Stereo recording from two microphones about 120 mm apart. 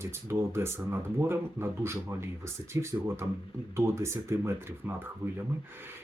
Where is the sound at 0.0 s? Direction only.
20° right (ahead or behind).